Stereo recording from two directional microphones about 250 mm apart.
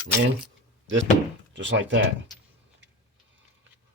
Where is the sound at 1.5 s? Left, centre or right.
Right.